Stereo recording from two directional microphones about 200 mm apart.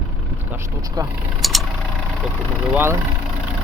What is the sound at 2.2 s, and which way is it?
Speech, 5° right (ahead or behind).